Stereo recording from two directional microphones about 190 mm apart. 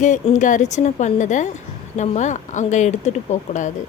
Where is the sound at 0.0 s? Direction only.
40° left (ahead or behind).